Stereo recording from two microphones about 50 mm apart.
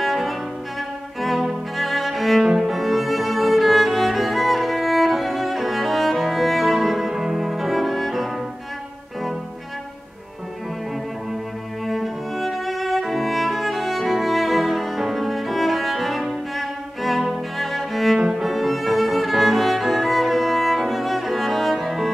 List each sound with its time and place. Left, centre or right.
0.0 s cello: centre
2.4 s cello: centre
2.7 s music: centre
11.8 s music: centre